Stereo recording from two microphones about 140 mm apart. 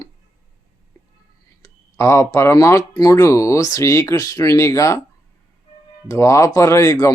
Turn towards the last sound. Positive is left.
turn(degrees=20)  # may be behind; listen again after turning